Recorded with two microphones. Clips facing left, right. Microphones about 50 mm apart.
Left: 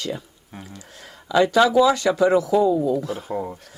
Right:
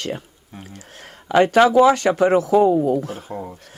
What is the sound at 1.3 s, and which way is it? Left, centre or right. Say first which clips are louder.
Speech: right 3 dB; right.